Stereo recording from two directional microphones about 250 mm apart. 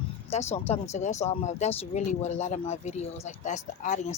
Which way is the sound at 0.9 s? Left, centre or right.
Left.